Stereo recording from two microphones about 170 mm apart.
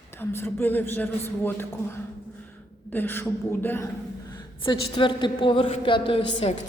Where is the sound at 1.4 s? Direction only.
15° left (ahead or behind).